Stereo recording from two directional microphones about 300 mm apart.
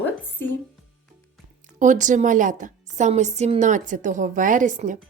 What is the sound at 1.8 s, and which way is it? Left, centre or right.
A woman's voice, right.